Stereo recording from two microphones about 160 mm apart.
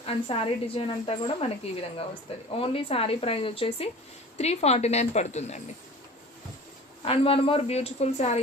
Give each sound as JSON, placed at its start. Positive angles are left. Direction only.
{"t": 0.0, "sound": "a woman's voice", "side_deg": 35}
{"t": 2.5, "sound": "a woman's voice", "side_deg": 35}
{"t": 7.0, "sound": "a woman's voice", "side_deg": 35}